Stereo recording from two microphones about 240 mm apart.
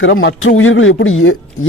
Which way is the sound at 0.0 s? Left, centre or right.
Left.